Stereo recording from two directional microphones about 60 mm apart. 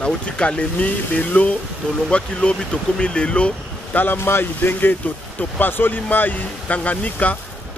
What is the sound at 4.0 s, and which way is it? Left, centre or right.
Speech, left.